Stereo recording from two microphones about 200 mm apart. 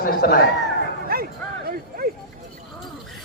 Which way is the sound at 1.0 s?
50° right (ahead or behind).